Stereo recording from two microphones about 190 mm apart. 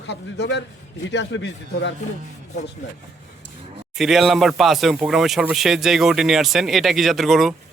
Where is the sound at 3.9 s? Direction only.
Centre (ahead or behind).